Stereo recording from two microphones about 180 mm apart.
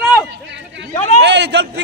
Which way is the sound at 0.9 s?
40° left (ahead or behind).